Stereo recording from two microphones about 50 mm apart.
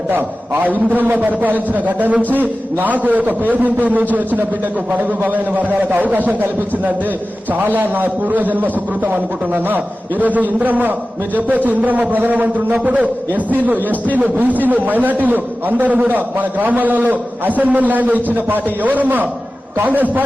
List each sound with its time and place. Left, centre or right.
0.1 s a man's voice: right
7.5 s a man's voice: right